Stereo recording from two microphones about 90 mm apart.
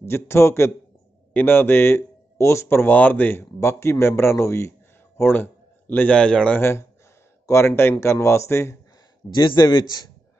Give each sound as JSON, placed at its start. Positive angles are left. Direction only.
{"t": 0.0, "sound": "a man's voice", "side_deg": 30}
{"t": 3.5, "sound": "a man's voice", "side_deg": 30}
{"t": 6.6, "sound": "a man's voice", "side_deg": 30}
{"t": 9.3, "sound": "speech", "side_deg": 55}